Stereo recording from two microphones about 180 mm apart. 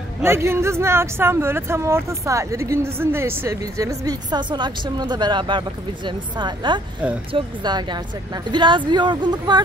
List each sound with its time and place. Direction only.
0.2 s speech: 15° right (ahead or behind)